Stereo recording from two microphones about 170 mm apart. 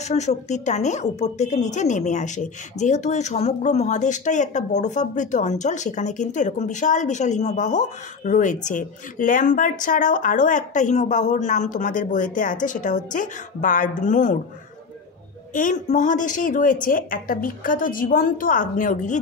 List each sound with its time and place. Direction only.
0.0 s speech: 40° left (ahead or behind)
15.5 s speech: 50° left (ahead or behind)